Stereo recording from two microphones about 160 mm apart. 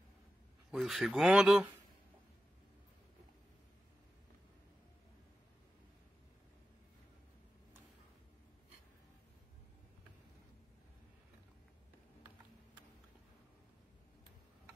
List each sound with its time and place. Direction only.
0.7 s speech: centre (ahead or behind)